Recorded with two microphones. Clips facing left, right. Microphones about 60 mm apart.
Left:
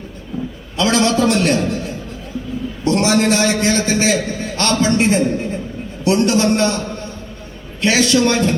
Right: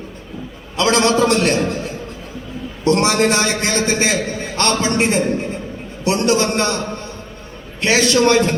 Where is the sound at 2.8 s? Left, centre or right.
Right.